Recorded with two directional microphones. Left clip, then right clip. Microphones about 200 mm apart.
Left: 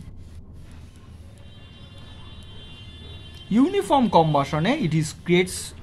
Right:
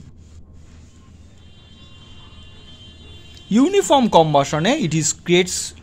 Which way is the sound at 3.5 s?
45° right (ahead or behind).